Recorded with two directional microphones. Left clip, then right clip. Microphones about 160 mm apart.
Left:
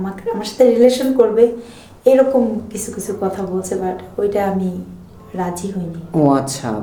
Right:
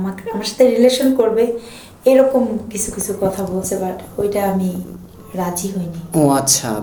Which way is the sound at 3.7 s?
15° left (ahead or behind).